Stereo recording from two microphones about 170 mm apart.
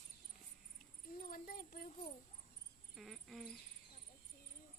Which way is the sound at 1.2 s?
55° left (ahead or behind).